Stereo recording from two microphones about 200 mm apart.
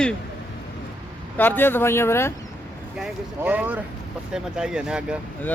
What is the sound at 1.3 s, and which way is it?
Speech, 10° left (ahead or behind).